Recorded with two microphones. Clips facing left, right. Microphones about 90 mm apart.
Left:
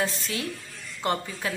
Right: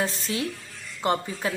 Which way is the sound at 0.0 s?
25° right (ahead or behind).